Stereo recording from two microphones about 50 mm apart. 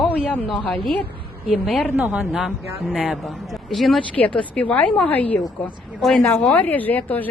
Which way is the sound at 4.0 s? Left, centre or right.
Left.